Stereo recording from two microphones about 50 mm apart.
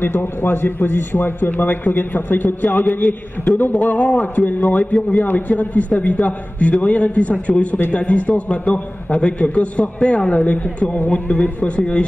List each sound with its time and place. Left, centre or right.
0.0 s a man's voice: left